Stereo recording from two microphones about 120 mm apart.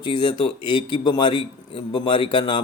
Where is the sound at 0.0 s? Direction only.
40° left (ahead or behind).